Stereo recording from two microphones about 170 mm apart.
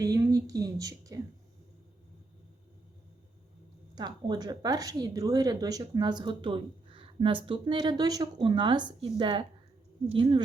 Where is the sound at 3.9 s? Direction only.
25° right (ahead or behind).